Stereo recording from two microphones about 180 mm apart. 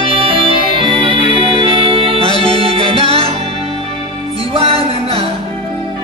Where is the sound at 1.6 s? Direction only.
30° right (ahead or behind).